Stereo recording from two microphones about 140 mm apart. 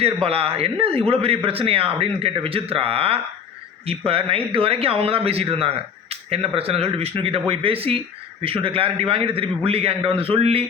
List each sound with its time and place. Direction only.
0.0 s speech: 45° right (ahead or behind)